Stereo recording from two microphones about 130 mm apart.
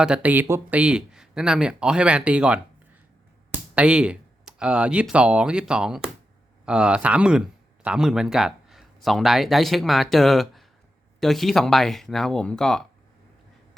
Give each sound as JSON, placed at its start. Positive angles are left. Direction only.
{"t": 0.0, "sound": "speech", "side_deg": -10}
{"t": 3.8, "sound": "speech", "side_deg": -10}